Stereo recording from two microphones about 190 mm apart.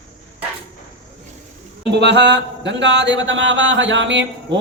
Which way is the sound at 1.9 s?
65° right (ahead or behind).